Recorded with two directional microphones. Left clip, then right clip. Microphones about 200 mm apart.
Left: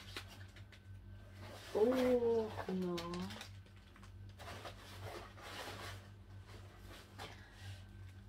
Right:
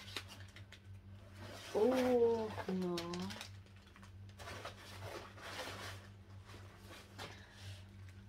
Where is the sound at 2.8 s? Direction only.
15° right (ahead or behind).